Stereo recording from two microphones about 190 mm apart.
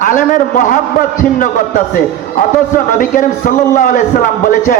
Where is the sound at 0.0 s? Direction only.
45° left (ahead or behind).